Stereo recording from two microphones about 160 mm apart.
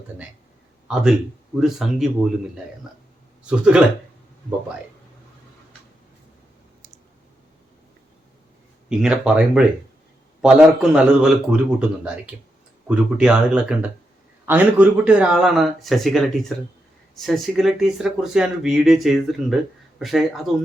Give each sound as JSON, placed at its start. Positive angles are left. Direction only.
{"t": 0.9, "sound": "speech", "side_deg": -5}
{"t": 3.4, "sound": "speech", "side_deg": -5}
{"t": 8.9, "sound": "speech", "side_deg": -5}